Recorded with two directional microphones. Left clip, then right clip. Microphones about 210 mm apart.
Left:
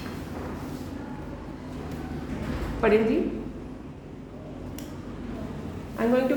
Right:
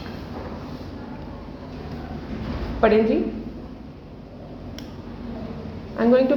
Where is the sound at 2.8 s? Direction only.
35° right (ahead or behind).